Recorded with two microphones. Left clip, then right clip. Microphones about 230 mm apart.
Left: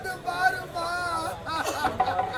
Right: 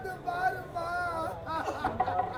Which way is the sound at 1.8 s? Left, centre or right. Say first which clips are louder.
Left 5 dB; centre.